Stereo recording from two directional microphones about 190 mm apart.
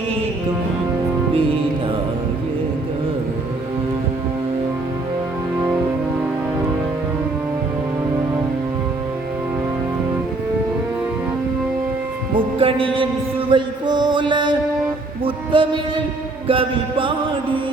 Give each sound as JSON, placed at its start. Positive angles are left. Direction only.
{"t": 12.3, "sound": "music", "side_deg": -25}